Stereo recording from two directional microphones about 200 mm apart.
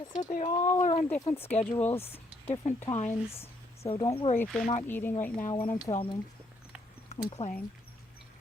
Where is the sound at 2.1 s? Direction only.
30° left (ahead or behind).